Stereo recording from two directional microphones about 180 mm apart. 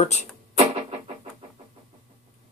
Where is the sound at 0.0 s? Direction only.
40° left (ahead or behind).